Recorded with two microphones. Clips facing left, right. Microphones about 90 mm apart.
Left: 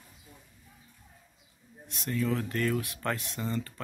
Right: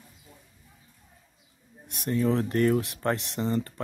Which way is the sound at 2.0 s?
30° right (ahead or behind).